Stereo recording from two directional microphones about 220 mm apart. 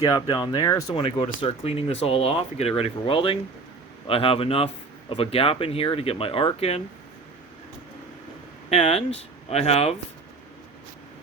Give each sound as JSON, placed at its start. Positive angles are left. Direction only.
{"t": 0.0, "sound": "speech", "side_deg": 15}
{"t": 8.7, "sound": "speech", "side_deg": 25}